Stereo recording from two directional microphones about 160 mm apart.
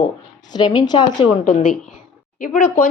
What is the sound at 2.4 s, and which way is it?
Speech, 60° left (ahead or behind).